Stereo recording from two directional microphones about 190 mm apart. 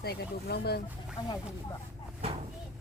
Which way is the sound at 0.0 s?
55° left (ahead or behind).